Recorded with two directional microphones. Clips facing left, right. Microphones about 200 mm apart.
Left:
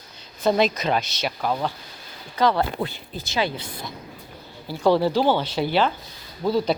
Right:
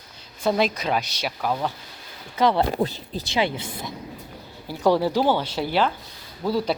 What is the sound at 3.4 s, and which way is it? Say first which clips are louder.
Speech: right 1 dB; 20° right (ahead or behind).